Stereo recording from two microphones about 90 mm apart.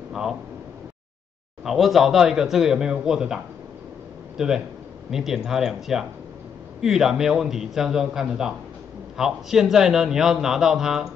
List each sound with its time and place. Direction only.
0.1 s a sound: 5° right (ahead or behind)
1.6 s a man's voice: centre (ahead or behind)
4.4 s a man's voice: 5° right (ahead or behind)